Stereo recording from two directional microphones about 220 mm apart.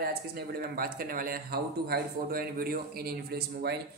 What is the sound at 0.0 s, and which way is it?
Speech, 45° right (ahead or behind).